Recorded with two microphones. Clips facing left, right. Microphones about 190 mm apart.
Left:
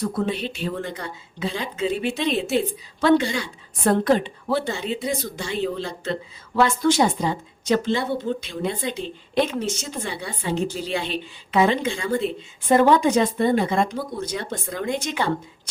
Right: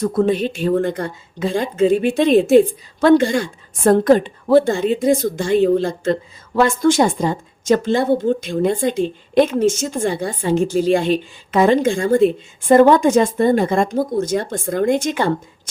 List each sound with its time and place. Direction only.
0.0 s a woman's voice: 45° right (ahead or behind)